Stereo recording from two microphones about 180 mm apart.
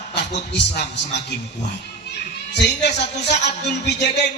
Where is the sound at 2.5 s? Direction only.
70° left (ahead or behind).